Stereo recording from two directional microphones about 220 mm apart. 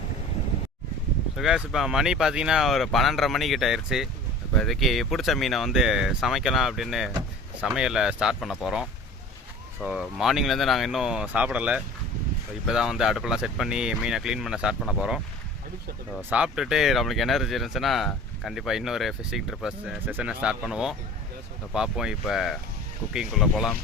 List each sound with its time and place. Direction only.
1.4 s speech: centre (ahead or behind)
16.3 s speech: 5° right (ahead or behind)